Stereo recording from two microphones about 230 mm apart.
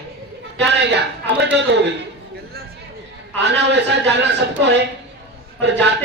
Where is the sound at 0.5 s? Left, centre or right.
Right.